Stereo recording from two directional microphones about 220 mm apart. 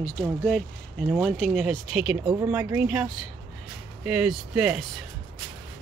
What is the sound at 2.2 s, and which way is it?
Speech, 20° right (ahead or behind).